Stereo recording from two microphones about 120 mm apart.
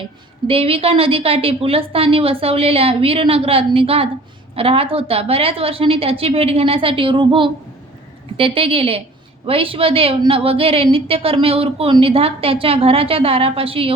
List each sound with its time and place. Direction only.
0.4 s a woman's voice: 50° right (ahead or behind)